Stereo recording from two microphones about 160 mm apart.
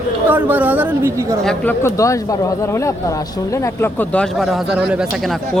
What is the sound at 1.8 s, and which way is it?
Speech, 20° left (ahead or behind).